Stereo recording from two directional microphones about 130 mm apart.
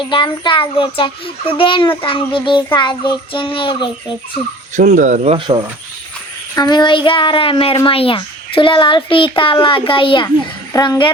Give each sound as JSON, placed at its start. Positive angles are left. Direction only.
{"t": 0.0, "sound": "a child's voice", "side_deg": 40}
{"t": 4.7, "sound": "speech", "side_deg": -70}
{"t": 5.4, "sound": "cricket", "side_deg": -40}
{"t": 6.6, "sound": "a child's voice", "side_deg": 35}